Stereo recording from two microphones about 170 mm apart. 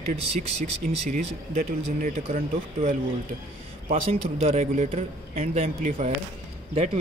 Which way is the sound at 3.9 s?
35° right (ahead or behind).